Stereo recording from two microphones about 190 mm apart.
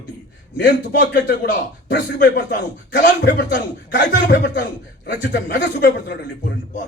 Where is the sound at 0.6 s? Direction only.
60° left (ahead or behind).